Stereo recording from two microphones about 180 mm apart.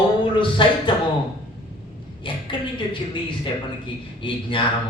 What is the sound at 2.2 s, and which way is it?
A man's voice, 25° left (ahead or behind).